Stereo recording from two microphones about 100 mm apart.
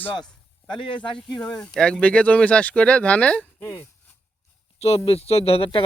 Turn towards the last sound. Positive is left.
turn(degrees=65)  # may be behind; listen again after turning